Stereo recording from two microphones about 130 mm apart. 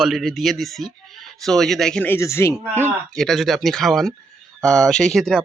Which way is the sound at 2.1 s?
20° left (ahead or behind).